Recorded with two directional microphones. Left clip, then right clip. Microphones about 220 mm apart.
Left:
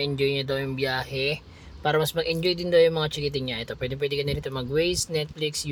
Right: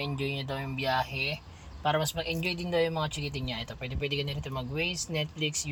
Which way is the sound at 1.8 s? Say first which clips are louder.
Left 5 dB; 15° left (ahead or behind).